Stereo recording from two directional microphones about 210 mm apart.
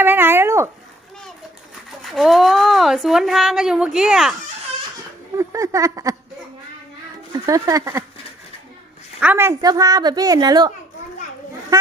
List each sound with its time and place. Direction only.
0.0 s dog: 10° right (ahead or behind)
2.0 s speech: centre (ahead or behind)
5.4 s a woman's voice: 15° right (ahead or behind)
7.3 s a woman's voice: 15° right (ahead or behind)
9.2 s a woman's voice: 10° right (ahead or behind)
11.7 s a woman's voice: 15° right (ahead or behind)